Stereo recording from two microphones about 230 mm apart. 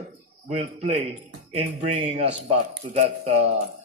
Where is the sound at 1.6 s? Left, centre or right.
Right.